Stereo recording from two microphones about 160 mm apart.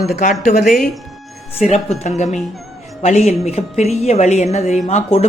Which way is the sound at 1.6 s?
45° left (ahead or behind).